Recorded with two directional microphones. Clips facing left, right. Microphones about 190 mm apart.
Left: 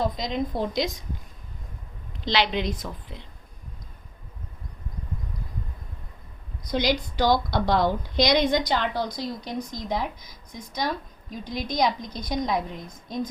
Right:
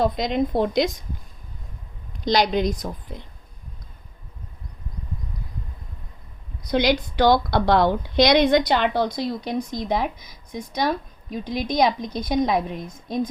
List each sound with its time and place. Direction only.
0.0 s speech: 65° right (ahead or behind)
2.2 s a woman's voice: 45° right (ahead or behind)
6.7 s speech: 65° right (ahead or behind)